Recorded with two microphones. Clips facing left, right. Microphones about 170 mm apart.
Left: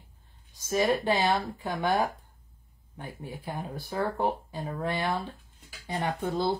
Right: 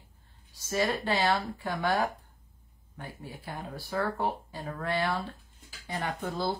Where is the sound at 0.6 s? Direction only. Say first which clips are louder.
Left 4 dB; 15° left (ahead or behind).